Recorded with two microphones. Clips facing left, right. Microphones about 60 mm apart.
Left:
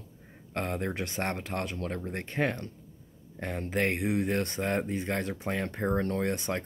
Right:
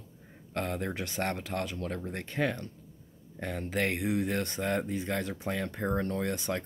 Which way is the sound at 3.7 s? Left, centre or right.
Left.